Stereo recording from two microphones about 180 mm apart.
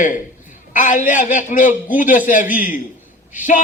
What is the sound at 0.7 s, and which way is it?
A man's voice, 45° left (ahead or behind).